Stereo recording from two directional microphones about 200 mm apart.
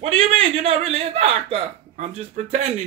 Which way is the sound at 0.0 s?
30° right (ahead or behind).